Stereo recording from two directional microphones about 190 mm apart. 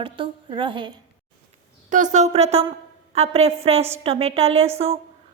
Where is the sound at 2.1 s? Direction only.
35° right (ahead or behind).